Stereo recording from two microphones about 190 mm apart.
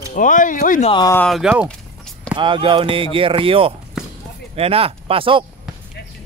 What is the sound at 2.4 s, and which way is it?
Speech, 25° right (ahead or behind).